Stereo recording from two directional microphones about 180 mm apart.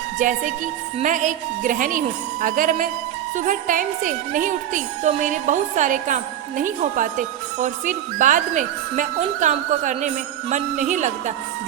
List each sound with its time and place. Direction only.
0.2 s speech: 45° right (ahead or behind)